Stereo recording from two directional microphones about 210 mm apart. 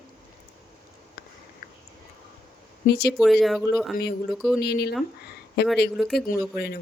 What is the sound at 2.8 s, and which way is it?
Speech, 50° left (ahead or behind).